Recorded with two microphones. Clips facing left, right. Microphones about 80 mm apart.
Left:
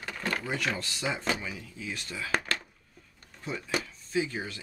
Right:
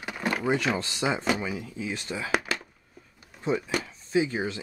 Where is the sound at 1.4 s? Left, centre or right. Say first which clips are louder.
Right 7 dB; right.